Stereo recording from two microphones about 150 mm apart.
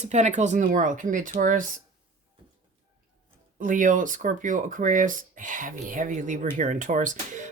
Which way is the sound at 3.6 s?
60° right (ahead or behind).